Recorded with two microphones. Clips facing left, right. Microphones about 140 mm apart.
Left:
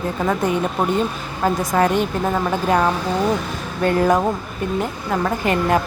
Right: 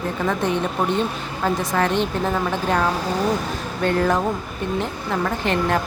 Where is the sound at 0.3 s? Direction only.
10° left (ahead or behind).